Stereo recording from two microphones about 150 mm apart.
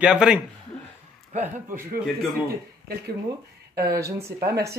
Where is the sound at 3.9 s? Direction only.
20° right (ahead or behind).